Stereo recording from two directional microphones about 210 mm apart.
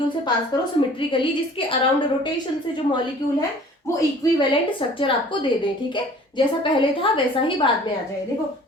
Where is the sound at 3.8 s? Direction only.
15° left (ahead or behind).